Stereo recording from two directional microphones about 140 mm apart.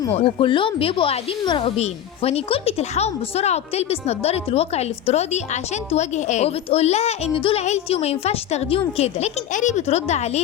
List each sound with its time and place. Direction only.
0.1 s speech: 40° left (ahead or behind)